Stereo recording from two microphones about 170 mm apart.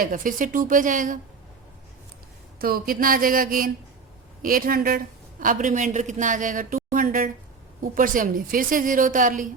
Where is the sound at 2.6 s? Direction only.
60° right (ahead or behind).